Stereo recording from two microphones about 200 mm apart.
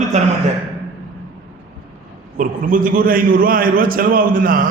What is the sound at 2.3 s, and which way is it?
A man's voice, 40° right (ahead or behind).